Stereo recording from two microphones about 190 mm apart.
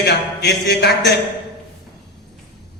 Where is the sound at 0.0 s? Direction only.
60° left (ahead or behind).